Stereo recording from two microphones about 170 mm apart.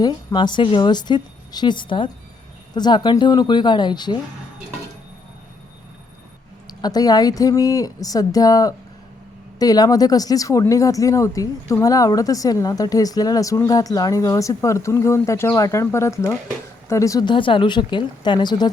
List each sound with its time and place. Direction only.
0.0 s speech: 25° left (ahead or behind)
6.7 s speech: 25° left (ahead or behind)